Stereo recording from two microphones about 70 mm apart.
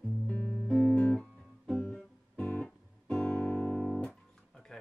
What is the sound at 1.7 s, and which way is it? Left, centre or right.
Music, centre.